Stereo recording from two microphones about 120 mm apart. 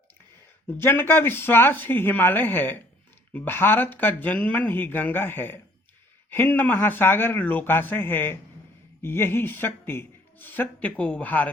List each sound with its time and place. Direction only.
0.7 s speech: 15° left (ahead or behind)